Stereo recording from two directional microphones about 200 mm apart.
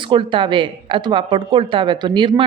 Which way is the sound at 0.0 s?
25° right (ahead or behind).